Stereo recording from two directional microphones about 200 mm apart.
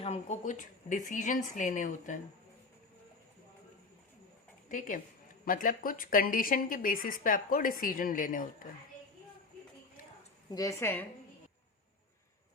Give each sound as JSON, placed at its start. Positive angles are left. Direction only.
{"t": 0.0, "sound": "a woman's voice", "side_deg": 35}
{"t": 5.5, "sound": "a woman's voice", "side_deg": 45}
{"t": 10.5, "sound": "a woman's voice", "side_deg": 15}